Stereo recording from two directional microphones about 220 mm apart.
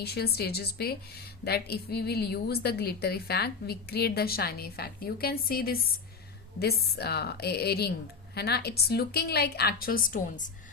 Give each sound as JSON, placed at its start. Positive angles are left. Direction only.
{"t": 0.0, "sound": "a woman's voice", "side_deg": 45}